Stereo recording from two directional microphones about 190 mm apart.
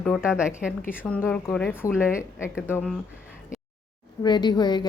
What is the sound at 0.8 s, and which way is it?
Speech, 10° left (ahead or behind).